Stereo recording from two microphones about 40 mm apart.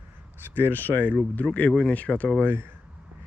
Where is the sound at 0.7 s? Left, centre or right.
Left.